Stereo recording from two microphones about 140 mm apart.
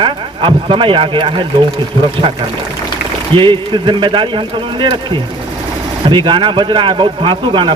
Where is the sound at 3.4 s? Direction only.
35° right (ahead or behind).